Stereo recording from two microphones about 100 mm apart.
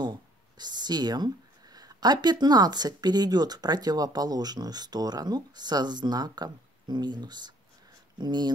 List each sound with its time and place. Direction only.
0.0 s speech: 45° right (ahead or behind)